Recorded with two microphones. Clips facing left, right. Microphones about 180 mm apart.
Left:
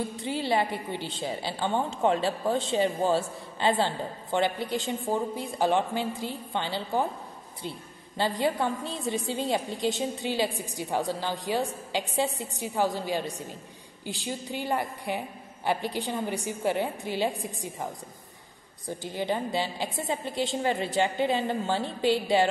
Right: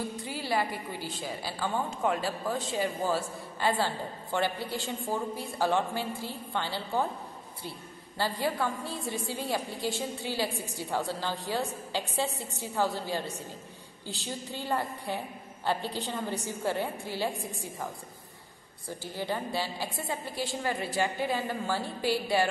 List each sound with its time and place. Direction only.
0.2 s a woman's voice: 25° left (ahead or behind)
8.2 s a woman's voice: 20° left (ahead or behind)
18.9 s a woman's voice: 20° left (ahead or behind)